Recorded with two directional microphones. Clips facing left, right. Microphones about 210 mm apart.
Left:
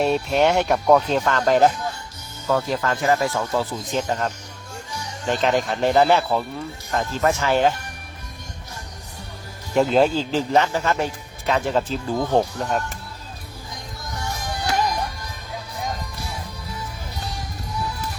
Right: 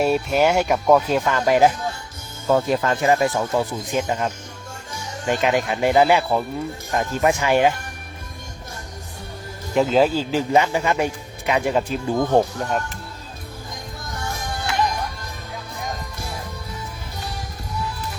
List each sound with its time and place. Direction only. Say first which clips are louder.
0.0 s a man's voice: right 1 dB; 5° right (ahead or behind)
2.5 s a man's voice: right 3 dB; 25° right (ahead or behind)
9.7 s a man's voice: even; centre (ahead or behind)